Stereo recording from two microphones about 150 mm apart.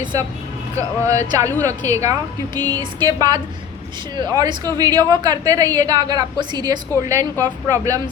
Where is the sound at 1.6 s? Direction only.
20° right (ahead or behind).